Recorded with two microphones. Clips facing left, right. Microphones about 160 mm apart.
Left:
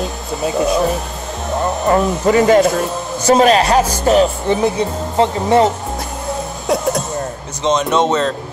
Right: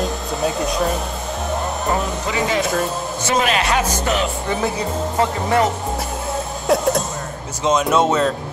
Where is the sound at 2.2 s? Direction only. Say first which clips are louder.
Left 12 dB; 50° left (ahead or behind).